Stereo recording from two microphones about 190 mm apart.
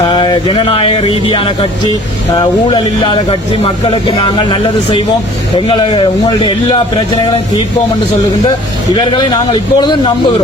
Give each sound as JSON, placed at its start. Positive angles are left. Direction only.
{"t": 0.0, "sound": "speech", "side_deg": 25}
{"t": 9.0, "sound": "speech", "side_deg": 25}